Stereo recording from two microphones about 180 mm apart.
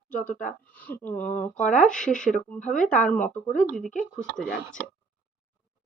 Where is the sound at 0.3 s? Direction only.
5° left (ahead or behind).